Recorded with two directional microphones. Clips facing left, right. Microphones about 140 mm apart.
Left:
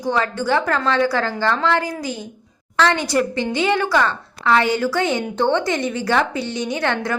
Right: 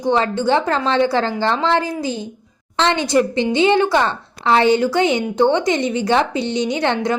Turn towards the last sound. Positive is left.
turn(degrees=-20)  # may be behind; listen again after turning